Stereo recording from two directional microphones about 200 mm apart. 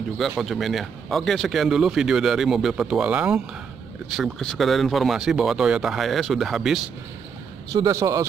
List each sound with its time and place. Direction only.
0.4 s speech: centre (ahead or behind)
7.7 s speech: 20° right (ahead or behind)